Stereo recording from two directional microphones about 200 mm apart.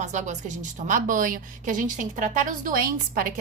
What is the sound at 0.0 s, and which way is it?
A woman's voice, 35° right (ahead or behind).